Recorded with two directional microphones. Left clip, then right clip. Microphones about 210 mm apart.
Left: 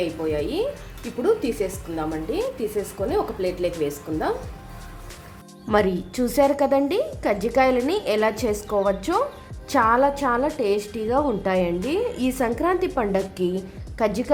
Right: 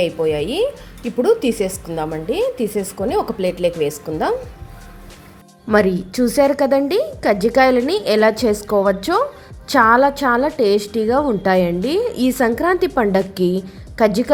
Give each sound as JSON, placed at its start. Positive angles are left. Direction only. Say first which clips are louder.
{"t": 0.0, "sound": "a woman's voice", "louder": "right 7 dB", "side_deg": -40}
{"t": 5.6, "sound": "a woman's voice", "louder": "right 5 dB", "side_deg": -15}